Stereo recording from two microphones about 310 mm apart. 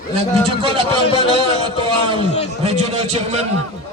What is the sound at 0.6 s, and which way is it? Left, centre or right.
A man's voice, centre.